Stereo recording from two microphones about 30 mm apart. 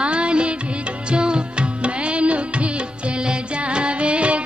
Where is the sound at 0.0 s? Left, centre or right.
Right.